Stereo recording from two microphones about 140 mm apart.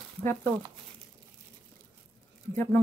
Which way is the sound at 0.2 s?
15° left (ahead or behind).